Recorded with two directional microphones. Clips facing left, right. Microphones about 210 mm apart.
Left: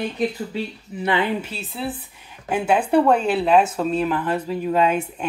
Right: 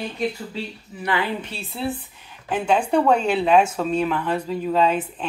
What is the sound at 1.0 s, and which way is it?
Speech, 25° left (ahead or behind).